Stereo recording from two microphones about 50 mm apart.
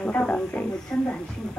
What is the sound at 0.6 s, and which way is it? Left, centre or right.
Speech, centre.